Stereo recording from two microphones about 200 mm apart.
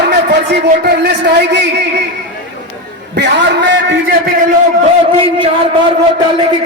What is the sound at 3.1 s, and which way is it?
A man's voice, 60° right (ahead or behind).